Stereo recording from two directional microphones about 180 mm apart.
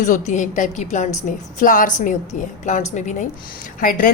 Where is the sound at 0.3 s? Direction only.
45° left (ahead or behind).